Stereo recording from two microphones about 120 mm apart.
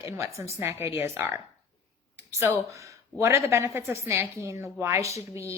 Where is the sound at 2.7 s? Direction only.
25° right (ahead or behind).